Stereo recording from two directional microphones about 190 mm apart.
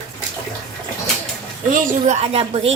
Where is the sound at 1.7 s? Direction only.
35° right (ahead or behind).